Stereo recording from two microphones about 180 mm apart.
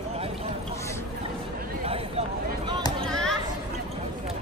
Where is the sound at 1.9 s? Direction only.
30° right (ahead or behind).